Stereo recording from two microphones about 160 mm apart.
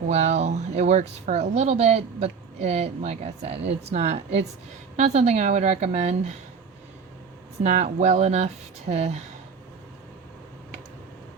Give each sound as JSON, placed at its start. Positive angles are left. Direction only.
{"t": 0.1, "sound": "speech", "side_deg": -45}
{"t": 7.6, "sound": "speech", "side_deg": -45}